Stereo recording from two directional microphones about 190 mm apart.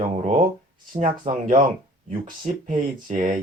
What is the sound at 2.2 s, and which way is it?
Speech, 45° right (ahead or behind).